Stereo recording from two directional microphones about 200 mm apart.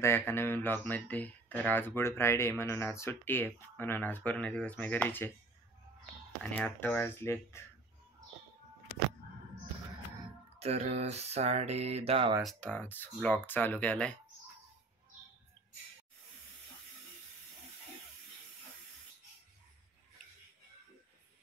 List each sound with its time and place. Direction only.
0.0 s speech: 10° left (ahead or behind)
6.4 s speech: 5° left (ahead or behind)
10.6 s a sound: 30° right (ahead or behind)
12.4 s speech: 5° left (ahead or behind)